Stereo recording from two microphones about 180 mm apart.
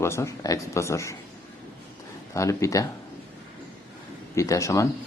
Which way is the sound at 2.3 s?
15° left (ahead or behind).